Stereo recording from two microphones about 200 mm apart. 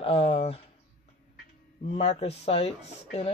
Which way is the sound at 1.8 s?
30° left (ahead or behind).